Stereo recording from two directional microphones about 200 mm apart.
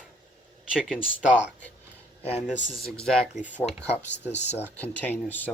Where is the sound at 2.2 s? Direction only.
30° left (ahead or behind).